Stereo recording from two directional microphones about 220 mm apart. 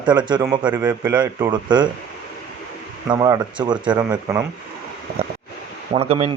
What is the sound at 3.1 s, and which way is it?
Speech, 15° right (ahead or behind).